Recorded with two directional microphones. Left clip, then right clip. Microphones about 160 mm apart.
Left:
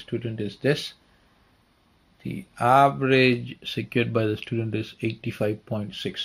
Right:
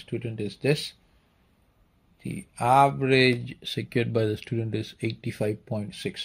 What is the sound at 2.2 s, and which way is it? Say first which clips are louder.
Speech: left 3 dB; 25° right (ahead or behind).